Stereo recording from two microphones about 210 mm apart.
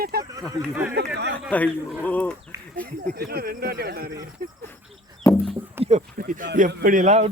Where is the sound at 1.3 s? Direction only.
5° left (ahead or behind).